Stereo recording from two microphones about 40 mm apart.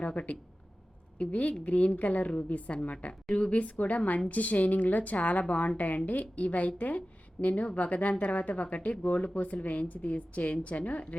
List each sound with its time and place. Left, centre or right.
0.0 s a woman's voice: left